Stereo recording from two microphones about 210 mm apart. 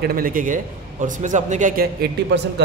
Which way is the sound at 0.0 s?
45° right (ahead or behind).